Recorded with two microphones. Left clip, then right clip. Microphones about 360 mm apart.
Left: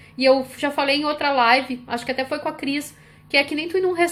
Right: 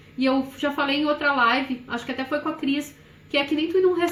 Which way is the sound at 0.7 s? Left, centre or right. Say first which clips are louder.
Left 2 dB; left.